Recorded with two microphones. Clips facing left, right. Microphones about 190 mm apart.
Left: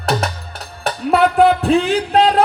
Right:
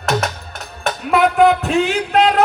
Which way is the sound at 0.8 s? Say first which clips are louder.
Left 1 dB; 35° left (ahead or behind).